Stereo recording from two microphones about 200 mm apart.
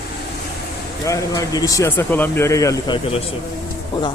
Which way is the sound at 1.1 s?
15° left (ahead or behind).